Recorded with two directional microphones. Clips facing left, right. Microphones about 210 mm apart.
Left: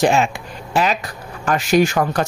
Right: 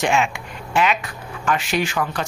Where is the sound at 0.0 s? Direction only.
35° left (ahead or behind).